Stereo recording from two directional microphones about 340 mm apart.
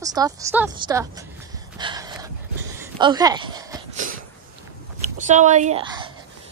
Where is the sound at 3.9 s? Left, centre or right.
Right.